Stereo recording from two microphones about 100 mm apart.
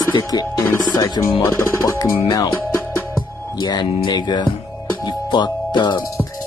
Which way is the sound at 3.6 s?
50° left (ahead or behind).